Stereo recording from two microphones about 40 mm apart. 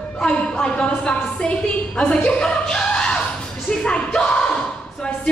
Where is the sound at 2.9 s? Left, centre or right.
Left.